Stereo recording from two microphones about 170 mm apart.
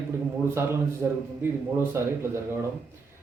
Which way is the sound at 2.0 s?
15° right (ahead or behind).